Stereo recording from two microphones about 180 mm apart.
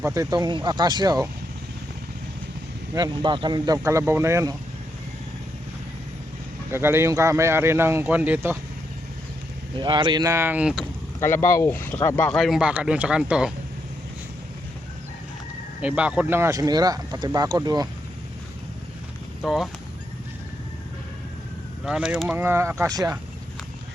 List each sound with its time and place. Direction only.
0.0 s speech: 15° right (ahead or behind)
2.9 s speech: 25° right (ahead or behind)
6.7 s speech: 15° right (ahead or behind)
9.7 s speech: 25° right (ahead or behind); by 10.8 s 5° right (ahead or behind)
11.3 s speech: 15° left (ahead or behind); by 13.5 s 5° right (ahead or behind)
15.8 s speech: 5° right (ahead or behind)
19.4 s speech: centre (ahead or behind)
21.8 s speech: 5° right (ahead or behind); by 23.1 s 20° right (ahead or behind)